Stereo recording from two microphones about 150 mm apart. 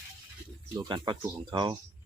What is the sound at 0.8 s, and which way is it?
Speech, 30° right (ahead or behind).